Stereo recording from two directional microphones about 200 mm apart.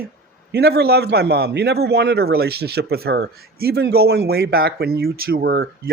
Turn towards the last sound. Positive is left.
turn(degrees=-50)  # may be behind; listen again after turning